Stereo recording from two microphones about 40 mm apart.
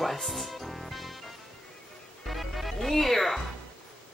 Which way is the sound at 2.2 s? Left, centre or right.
Centre.